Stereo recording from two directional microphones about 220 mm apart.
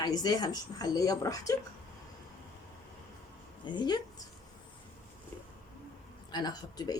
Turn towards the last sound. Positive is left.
turn(degrees=20)  # may be behind; listen again after turning